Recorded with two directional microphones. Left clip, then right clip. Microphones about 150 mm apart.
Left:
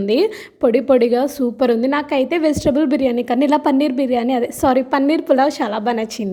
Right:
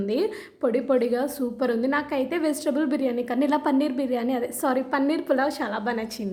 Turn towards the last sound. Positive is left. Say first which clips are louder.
# left 8 dB
turn(degrees=45)  # may be behind; listen again after turning